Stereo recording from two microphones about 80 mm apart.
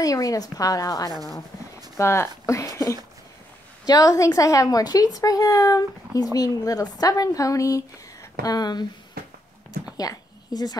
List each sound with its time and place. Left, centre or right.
0.0 s speech: left
2.0 s speech: left
3.8 s speech: left
9.9 s a sound: left